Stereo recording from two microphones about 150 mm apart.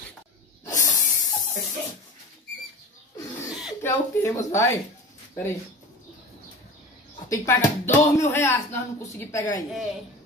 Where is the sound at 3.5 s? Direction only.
Centre (ahead or behind).